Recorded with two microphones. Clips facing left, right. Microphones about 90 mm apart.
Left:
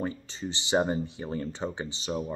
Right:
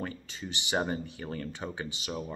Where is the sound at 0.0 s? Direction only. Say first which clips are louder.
Left 5 dB; 25° left (ahead or behind).